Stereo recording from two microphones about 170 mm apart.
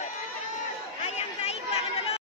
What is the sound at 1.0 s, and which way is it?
Chatter, 40° left (ahead or behind).